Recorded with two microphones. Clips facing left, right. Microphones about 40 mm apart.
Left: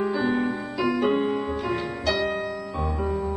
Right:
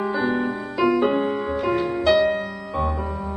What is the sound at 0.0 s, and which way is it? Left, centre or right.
Music, centre.